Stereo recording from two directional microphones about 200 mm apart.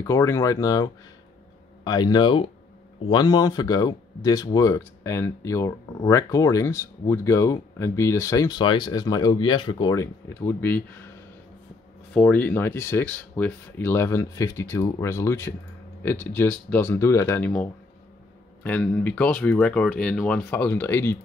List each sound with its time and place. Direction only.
0.0 s speech: 15° left (ahead or behind)
12.1 s speech: 10° left (ahead or behind)